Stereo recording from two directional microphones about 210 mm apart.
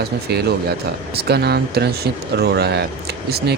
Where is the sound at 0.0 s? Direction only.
50° right (ahead or behind).